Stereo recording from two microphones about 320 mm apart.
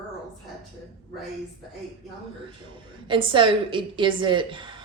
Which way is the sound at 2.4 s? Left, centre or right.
Centre.